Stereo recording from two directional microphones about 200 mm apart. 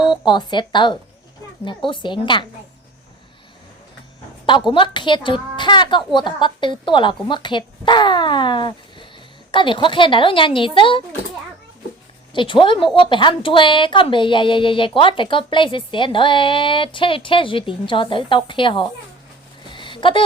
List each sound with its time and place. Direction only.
0.0 s a woman's voice: 25° left (ahead or behind)
4.7 s a woman's voice: 25° left (ahead or behind)
12.3 s a woman's voice: 25° left (ahead or behind)
19.7 s a sound: 25° left (ahead or behind)